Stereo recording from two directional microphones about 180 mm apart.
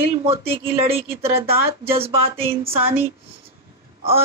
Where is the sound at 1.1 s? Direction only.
15° right (ahead or behind).